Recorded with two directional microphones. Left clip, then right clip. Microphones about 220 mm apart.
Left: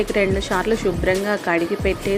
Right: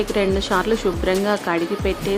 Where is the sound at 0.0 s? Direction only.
Centre (ahead or behind).